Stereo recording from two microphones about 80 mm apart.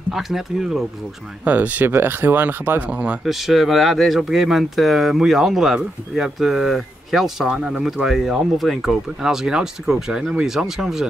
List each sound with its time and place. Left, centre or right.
0.1 s speech: centre
1.4 s speech: centre
3.3 s speech: centre